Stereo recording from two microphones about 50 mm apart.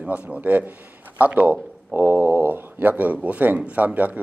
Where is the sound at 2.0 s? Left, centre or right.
Right.